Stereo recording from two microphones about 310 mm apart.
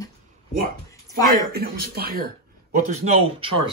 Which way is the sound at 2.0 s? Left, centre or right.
Right.